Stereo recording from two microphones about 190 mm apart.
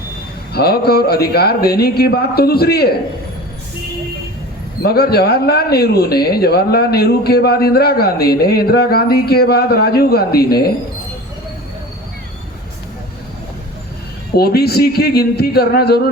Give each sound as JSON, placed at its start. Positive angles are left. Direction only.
{"t": 0.5, "sound": "speech", "side_deg": 55}
{"t": 4.8, "sound": "speech", "side_deg": 55}
{"t": 14.3, "sound": "speech", "side_deg": 55}